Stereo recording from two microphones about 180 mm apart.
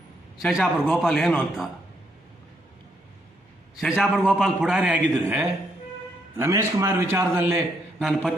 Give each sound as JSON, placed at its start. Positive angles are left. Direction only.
{"t": 0.4, "sound": "a man's voice", "side_deg": 0}
{"t": 3.8, "sound": "a man's voice", "side_deg": 0}
{"t": 6.3, "sound": "a man's voice", "side_deg": -15}
{"t": 7.9, "sound": "a man's voice", "side_deg": 0}